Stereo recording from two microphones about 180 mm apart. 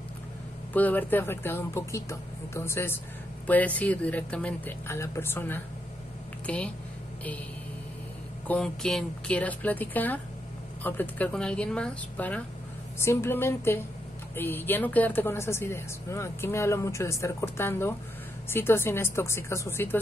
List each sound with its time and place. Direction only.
0.7 s speech: 10° left (ahead or behind)
8.5 s speech: 5° left (ahead or behind)